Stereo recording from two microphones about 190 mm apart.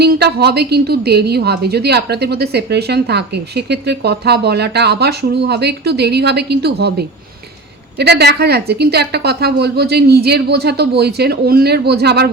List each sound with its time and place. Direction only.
0.0 s a woman's voice: 60° right (ahead or behind)